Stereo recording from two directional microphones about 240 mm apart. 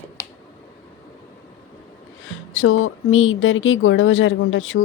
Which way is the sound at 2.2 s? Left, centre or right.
Left.